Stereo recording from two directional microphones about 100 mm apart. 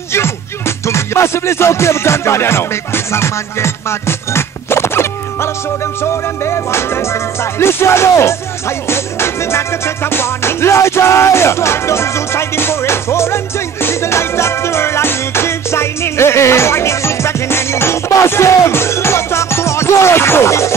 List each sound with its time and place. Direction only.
0.1 s music: 25° left (ahead or behind)